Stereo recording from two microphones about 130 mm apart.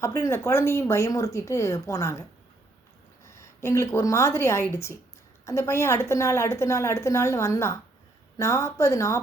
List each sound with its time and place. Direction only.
0.0 s a woman's voice: 25° left (ahead or behind)
3.2 s a woman's voice: 20° left (ahead or behind)